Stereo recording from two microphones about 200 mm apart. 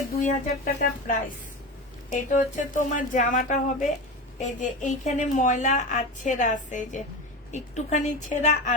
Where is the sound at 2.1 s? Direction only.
40° left (ahead or behind).